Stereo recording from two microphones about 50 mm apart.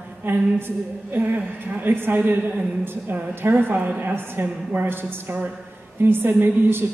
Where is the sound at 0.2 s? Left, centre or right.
Right.